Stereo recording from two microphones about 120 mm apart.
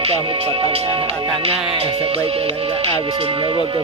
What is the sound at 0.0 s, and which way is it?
Speech, 55° right (ahead or behind).